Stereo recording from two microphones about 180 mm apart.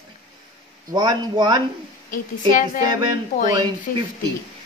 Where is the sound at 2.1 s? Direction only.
45° left (ahead or behind).